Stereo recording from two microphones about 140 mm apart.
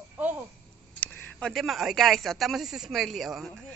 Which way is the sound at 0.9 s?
15° left (ahead or behind).